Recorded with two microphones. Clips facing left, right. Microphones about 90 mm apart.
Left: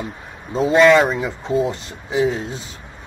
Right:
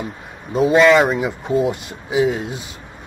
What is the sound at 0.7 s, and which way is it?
Speech, centre (ahead or behind).